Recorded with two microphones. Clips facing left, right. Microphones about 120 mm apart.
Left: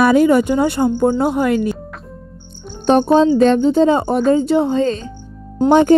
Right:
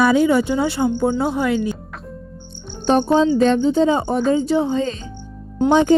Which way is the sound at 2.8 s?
70° left (ahead or behind).